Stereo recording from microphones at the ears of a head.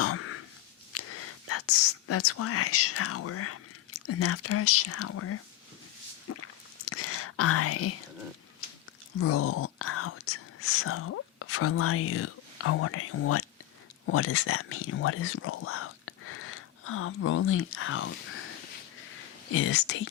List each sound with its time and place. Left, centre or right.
0.0 s a sound: left
0.9 s speech: left
6.2 s whispering: left
9.1 s speech: left